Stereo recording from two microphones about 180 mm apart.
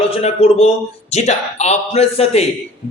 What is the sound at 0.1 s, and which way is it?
A man's voice, 35° left (ahead or behind).